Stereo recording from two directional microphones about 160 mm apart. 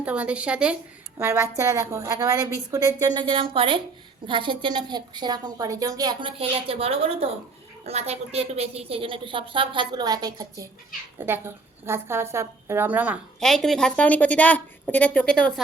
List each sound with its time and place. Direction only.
0.0 s a woman's voice: 10° right (ahead or behind)
1.2 s a woman's voice: 15° right (ahead or behind)
13.4 s a woman's voice: centre (ahead or behind)